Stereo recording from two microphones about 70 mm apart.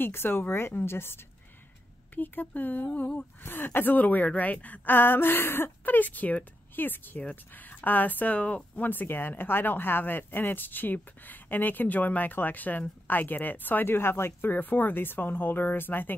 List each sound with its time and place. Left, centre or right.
0.0 s speech: left